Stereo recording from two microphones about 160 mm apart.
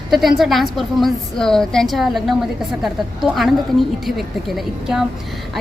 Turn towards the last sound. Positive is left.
turn(degrees=0)  # may be behind; listen again after turning